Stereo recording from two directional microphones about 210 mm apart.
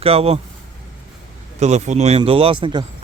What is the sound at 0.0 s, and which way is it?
Speech, 30° right (ahead or behind).